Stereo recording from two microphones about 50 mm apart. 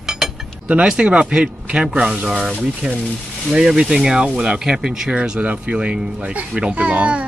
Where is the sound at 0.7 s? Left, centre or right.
Right.